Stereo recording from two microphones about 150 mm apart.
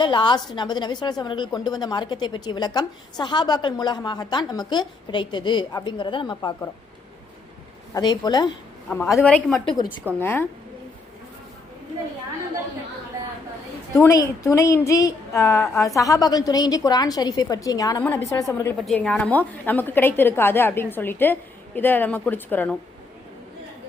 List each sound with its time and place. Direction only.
0.0 s a woman's voice: 30° left (ahead or behind)
7.9 s a woman's voice: 25° left (ahead or behind)
9.2 s a woman's voice: 5° left (ahead or behind)
9.6 s a woman's voice: 30° left (ahead or behind)
10.2 s a woman's voice: 15° left (ahead or behind)
13.9 s a woman's voice: 20° left (ahead or behind)
18.9 s a woman's voice: 10° left (ahead or behind)